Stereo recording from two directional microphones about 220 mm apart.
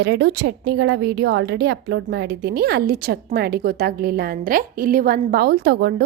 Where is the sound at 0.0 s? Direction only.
50° right (ahead or behind).